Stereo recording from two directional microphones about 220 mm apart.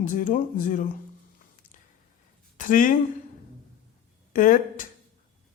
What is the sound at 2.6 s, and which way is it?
Speech, 35° left (ahead or behind).